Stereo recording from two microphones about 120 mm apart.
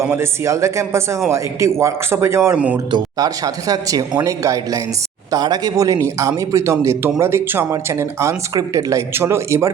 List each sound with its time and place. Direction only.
0.0 s a man's voice: 20° right (ahead or behind)